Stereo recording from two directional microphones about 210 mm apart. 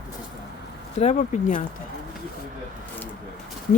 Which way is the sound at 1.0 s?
35° left (ahead or behind).